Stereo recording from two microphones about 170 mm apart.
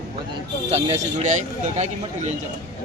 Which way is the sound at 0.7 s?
40° right (ahead or behind).